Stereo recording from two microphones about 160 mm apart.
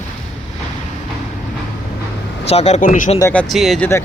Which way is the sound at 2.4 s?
40° left (ahead or behind).